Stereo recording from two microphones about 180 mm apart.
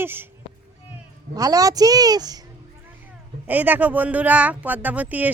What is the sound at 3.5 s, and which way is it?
A woman's voice, 10° right (ahead or behind).